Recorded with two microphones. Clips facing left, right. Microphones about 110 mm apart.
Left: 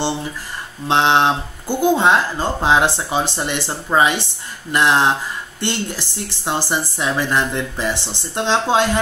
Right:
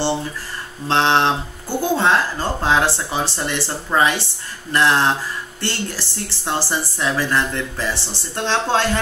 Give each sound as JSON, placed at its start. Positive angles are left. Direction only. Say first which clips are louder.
{"t": 0.8, "sound": "speech", "louder": "left 2 dB", "side_deg": 15}